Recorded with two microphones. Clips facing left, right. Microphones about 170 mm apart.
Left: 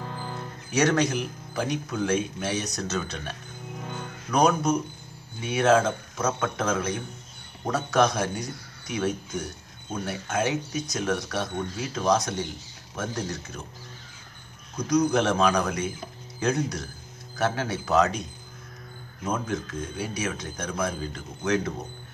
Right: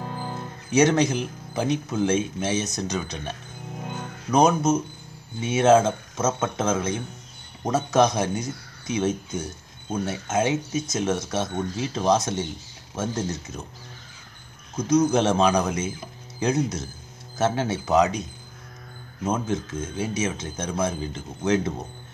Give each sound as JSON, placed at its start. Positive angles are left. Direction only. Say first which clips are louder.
{"t": 0.0, "sound": "speech", "louder": "right 3 dB", "side_deg": -20}
{"t": 14.8, "sound": "speech", "louder": "right 3 dB", "side_deg": -25}
{"t": 19.2, "sound": "speech", "louder": "right 3 dB", "side_deg": -25}